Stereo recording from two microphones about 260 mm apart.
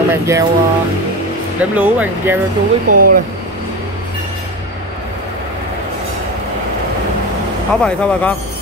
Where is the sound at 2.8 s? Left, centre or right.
Right.